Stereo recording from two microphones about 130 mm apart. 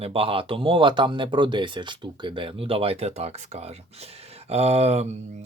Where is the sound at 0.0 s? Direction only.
45° right (ahead or behind).